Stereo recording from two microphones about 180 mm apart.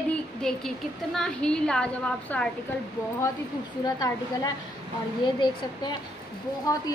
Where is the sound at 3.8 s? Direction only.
20° left (ahead or behind).